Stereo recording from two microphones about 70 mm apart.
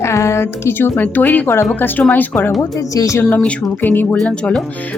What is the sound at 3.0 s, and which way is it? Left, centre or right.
Speech, left.